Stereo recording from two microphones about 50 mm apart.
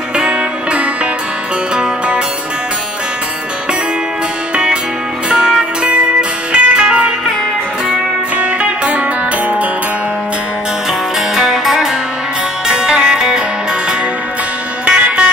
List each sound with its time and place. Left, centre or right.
0.1 s music: right
5.3 s music: centre
8.4 s music: right
11.3 s music: centre
14.9 s a sound: right